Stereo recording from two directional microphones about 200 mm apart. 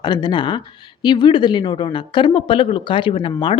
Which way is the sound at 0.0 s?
20° left (ahead or behind).